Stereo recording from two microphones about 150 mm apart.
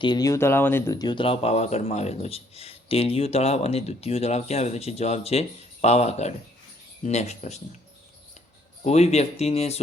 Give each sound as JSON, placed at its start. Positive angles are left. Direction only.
{"t": 0.0, "sound": "speech", "side_deg": 25}
{"t": 8.8, "sound": "speech", "side_deg": 50}